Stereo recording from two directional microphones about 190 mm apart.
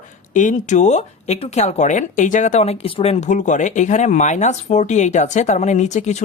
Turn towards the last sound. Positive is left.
turn(degrees=35)  # may be behind; listen again after turning